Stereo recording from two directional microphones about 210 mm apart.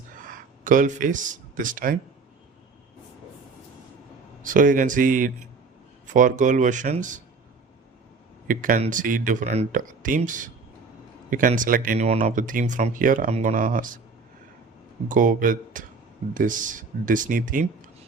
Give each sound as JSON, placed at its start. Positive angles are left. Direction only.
{"t": 0.2, "sound": "speech", "side_deg": -40}
{"t": 4.4, "sound": "speech", "side_deg": -40}
{"t": 8.4, "sound": "speech", "side_deg": -40}
{"t": 15.0, "sound": "speech", "side_deg": -40}